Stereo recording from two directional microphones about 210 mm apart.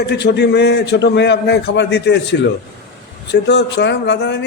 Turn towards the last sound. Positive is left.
turn(degrees=55)  # may be behind; listen again after turning